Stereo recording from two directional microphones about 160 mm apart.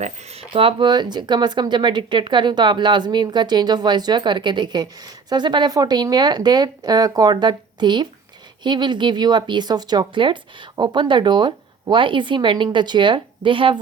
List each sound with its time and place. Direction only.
0.0 s speech: 40° right (ahead or behind)